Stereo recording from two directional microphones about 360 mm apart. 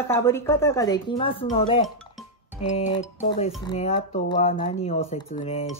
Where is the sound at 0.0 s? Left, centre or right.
Centre.